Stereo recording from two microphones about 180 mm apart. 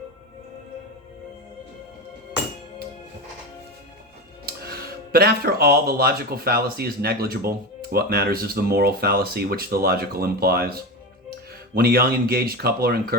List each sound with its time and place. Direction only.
4.4 s speech: 60° right (ahead or behind)